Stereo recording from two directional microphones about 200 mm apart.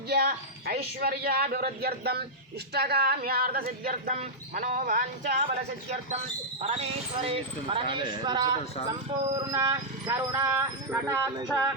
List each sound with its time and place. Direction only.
0.1 s speech: 50° right (ahead or behind)
6.6 s speech: 30° right (ahead or behind); by 11.4 s 15° right (ahead or behind)